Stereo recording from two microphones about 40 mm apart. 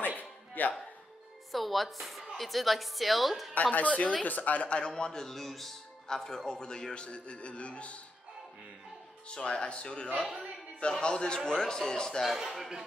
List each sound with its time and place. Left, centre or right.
0.2 s music: left
1.5 s speech: centre
3.7 s speech: left
4.6 s a man's voice: left
9.3 s a man's voice: left
12.3 s a man's voice: centre